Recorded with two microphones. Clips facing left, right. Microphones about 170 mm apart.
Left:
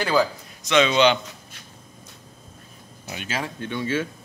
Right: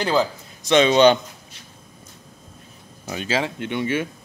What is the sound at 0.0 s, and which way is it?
Speech, 20° right (ahead or behind).